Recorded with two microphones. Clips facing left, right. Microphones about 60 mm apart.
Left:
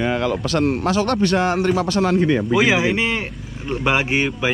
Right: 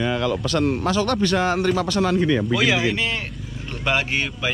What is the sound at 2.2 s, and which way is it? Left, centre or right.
Speech, left.